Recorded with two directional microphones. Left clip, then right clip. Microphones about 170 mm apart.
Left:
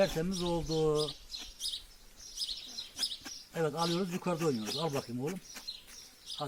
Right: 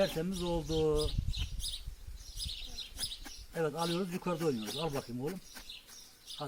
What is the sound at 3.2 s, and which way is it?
Speech, 10° left (ahead or behind).